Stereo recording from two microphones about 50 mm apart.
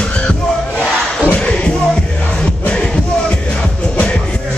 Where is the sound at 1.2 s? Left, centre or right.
Left.